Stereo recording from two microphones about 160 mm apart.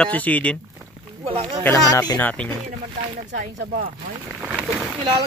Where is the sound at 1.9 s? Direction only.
25° left (ahead or behind).